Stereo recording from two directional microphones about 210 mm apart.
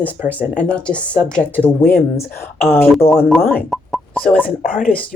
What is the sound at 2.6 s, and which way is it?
Speech, 10° left (ahead or behind).